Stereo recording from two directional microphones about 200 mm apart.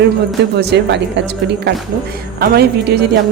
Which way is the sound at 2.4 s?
55° right (ahead or behind).